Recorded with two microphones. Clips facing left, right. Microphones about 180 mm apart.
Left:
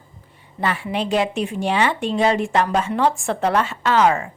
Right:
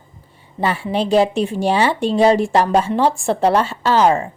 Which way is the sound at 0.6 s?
30° right (ahead or behind).